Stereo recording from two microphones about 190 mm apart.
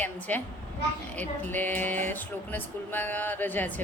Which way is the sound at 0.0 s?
10° left (ahead or behind).